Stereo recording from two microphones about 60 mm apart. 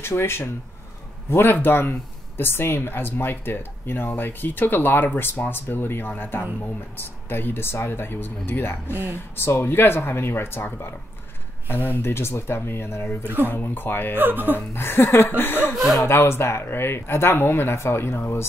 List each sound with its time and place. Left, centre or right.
0.0 s speech: left
13.2 s speech: right
13.5 s speech: left
14.1 s speech: right
14.7 s speech: left
15.7 s speech: centre
16.0 s speech: left